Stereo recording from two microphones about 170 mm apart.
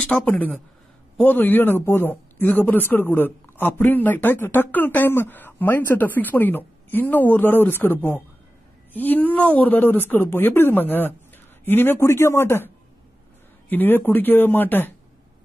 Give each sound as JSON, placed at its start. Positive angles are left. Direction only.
{"t": 0.0, "sound": "speech", "side_deg": 10}